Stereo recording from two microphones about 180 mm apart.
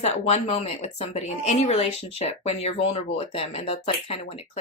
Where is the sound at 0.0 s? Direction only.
35° left (ahead or behind).